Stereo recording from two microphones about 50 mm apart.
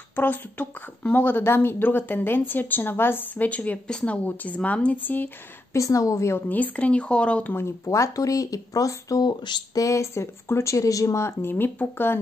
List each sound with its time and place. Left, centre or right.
0.1 s speech: left
3.3 s a woman's voice: left
4.9 s speech: left
5.7 s a woman's voice: left
6.5 s a woman's voice: left
7.5 s speech: left
9.8 s speech: left
11.5 s speech: left